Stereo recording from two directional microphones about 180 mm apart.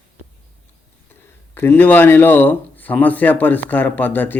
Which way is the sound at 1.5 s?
10° left (ahead or behind).